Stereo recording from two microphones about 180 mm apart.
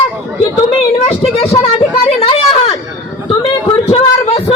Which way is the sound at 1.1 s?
35° left (ahead or behind).